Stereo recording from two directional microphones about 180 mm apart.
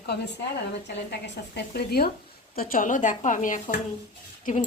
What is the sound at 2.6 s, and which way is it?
Speech, 50° left (ahead or behind).